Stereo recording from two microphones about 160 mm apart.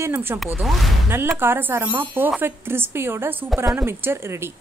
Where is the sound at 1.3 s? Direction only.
15° right (ahead or behind).